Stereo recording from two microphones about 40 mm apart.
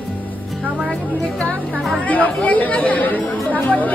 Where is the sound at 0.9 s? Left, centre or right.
Left.